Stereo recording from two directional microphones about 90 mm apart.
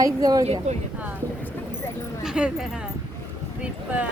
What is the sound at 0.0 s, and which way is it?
Speech, 40° right (ahead or behind).